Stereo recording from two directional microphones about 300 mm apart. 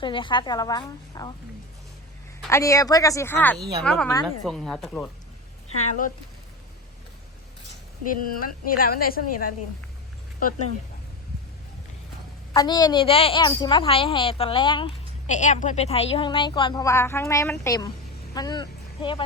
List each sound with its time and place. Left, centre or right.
0.0 s a woman's voice: centre
2.5 s a woman's voice: centre
8.0 s speech: left
12.5 s a woman's voice: centre